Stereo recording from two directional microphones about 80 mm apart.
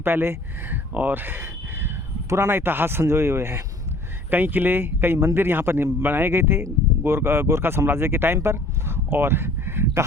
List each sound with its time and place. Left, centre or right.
0.0 s speech: right
4.3 s a man's voice: right